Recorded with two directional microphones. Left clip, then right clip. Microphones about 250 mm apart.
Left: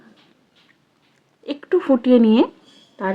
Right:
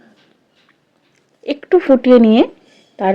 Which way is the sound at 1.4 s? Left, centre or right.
Centre.